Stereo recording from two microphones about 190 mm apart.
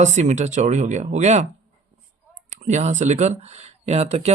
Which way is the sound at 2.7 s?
40° right (ahead or behind).